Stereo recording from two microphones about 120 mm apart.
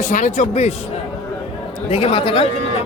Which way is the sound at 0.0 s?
90° left.